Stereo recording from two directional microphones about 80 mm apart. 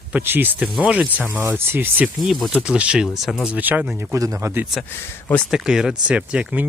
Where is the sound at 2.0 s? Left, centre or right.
Centre.